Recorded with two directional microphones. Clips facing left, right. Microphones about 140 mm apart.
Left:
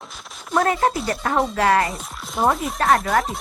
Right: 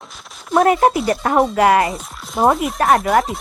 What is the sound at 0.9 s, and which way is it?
Speech, centre (ahead or behind).